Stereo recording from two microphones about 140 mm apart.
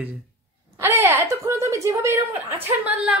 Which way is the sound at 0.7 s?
15° right (ahead or behind).